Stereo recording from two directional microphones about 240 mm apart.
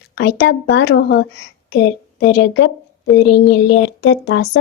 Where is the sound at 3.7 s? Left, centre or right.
Left.